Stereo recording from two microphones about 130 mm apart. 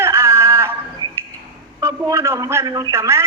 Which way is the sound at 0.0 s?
20° right (ahead or behind).